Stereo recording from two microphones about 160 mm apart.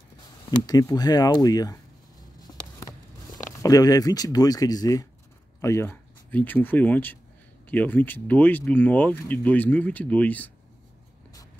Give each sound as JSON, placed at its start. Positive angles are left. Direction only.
{"t": 0.7, "sound": "speech", "side_deg": 25}
{"t": 3.6, "sound": "speech", "side_deg": 20}